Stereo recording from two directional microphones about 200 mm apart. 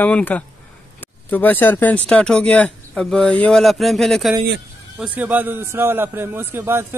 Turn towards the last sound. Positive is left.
turn(degrees=-10)  # may be behind; listen again after turning